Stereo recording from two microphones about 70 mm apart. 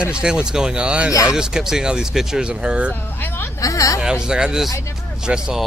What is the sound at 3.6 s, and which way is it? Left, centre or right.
Speech, left.